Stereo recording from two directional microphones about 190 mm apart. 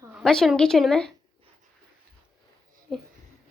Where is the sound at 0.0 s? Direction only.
5° right (ahead or behind).